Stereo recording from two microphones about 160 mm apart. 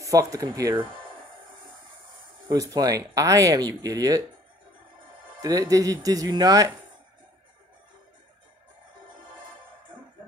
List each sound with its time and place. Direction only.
0.0 s speech: 20° right (ahead or behind)
2.4 s speech: 20° right (ahead or behind)
5.4 s speech: 20° right (ahead or behind)